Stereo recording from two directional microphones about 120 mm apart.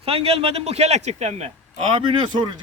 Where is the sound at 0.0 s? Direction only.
55° right (ahead or behind).